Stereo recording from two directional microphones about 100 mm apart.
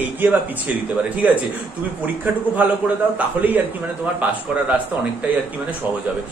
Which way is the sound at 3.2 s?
15° right (ahead or behind).